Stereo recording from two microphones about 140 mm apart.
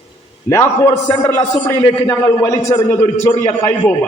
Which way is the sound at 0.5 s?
20° left (ahead or behind).